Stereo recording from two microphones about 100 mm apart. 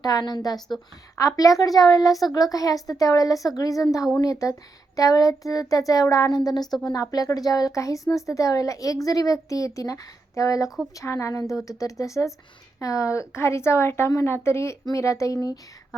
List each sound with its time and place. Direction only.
0.0 s a woman's voice: 45° left (ahead or behind)